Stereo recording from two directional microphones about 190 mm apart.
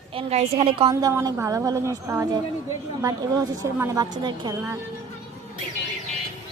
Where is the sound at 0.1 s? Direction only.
30° right (ahead or behind).